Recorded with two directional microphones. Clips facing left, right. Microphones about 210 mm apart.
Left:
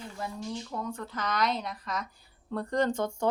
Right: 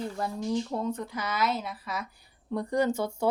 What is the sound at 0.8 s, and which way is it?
A woman's voice, 20° right (ahead or behind).